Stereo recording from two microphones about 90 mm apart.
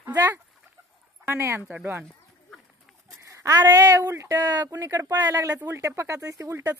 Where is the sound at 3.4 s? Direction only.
40° right (ahead or behind).